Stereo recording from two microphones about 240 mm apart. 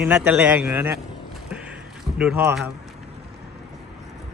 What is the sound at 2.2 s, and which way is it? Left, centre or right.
Speech, centre.